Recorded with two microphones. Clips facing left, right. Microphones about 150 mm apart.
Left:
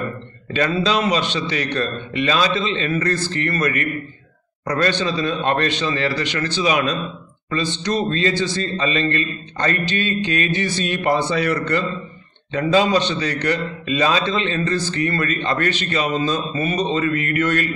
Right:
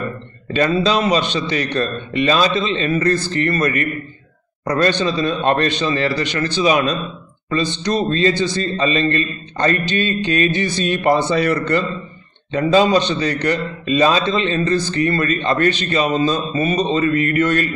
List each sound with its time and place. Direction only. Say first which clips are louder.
0.6 s a man's voice: right 3 dB; 30° right (ahead or behind)